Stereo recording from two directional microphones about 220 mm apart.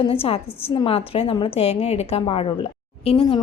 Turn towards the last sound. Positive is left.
turn(degrees=25)  # may be behind; listen again after turning